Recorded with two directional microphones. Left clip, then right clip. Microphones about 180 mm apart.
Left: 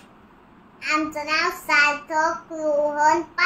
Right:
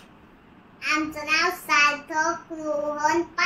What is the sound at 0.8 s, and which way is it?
Child singing, 15° left (ahead or behind).